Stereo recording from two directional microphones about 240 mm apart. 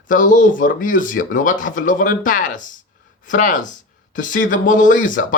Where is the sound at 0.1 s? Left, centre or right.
Left.